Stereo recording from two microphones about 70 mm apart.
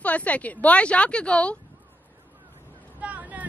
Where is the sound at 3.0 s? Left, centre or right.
Right.